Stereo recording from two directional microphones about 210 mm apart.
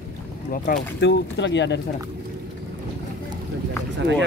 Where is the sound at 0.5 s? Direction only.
40° left (ahead or behind).